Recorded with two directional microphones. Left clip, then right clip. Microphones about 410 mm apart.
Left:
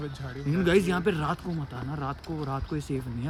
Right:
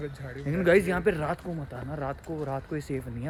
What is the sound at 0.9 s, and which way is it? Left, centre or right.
Speech, centre.